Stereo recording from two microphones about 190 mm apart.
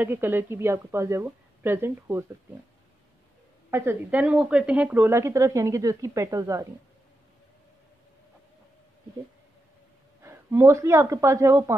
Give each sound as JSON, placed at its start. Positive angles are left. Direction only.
{"t": 0.0, "sound": "speech", "side_deg": -10}
{"t": 3.7, "sound": "speech", "side_deg": -10}
{"t": 10.2, "sound": "speech", "side_deg": -15}